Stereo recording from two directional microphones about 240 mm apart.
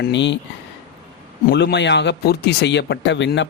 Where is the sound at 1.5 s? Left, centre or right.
Left.